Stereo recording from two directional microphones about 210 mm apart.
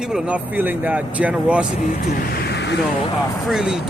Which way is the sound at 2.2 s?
50° left (ahead or behind).